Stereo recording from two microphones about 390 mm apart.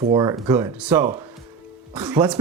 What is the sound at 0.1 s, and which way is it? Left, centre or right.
Speech, centre.